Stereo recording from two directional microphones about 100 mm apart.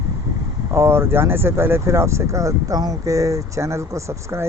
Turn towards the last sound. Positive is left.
turn(degrees=-30)  # may be behind; listen again after turning